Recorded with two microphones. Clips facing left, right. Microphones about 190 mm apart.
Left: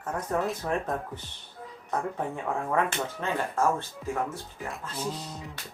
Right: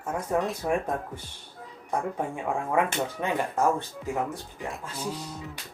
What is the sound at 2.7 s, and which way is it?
Speech, 15° right (ahead or behind).